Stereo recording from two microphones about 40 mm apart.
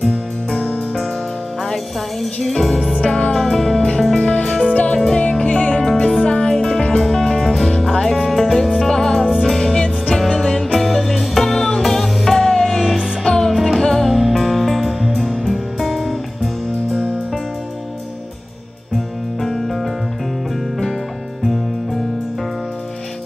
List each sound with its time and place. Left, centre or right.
2.4 s music: centre
2.9 s music: left
3.3 s music: centre
4.3 s music: left
13.5 s music: centre
13.7 s music: centre